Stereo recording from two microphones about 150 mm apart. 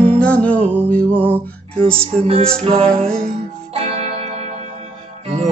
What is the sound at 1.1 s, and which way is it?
Music, 10° right (ahead or behind).